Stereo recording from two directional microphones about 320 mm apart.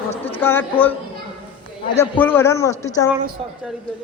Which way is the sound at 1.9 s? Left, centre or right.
Centre.